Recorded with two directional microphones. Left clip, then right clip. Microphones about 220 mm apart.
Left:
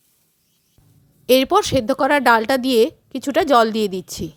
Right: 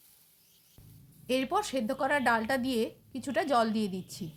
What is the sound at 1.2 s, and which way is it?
A woman's voice, 45° left (ahead or behind).